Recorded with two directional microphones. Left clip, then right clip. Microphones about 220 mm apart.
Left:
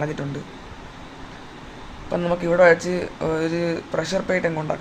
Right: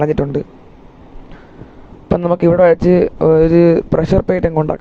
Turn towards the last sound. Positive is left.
turn(degrees=-30)  # may be behind; listen again after turning